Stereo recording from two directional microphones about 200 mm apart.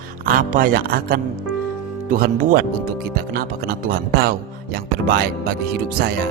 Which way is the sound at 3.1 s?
50° right (ahead or behind).